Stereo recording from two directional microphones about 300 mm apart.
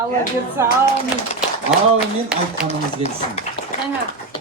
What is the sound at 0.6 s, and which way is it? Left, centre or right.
Speech, centre.